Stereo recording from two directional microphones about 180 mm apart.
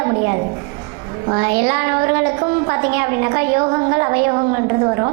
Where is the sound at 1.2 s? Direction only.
20° right (ahead or behind).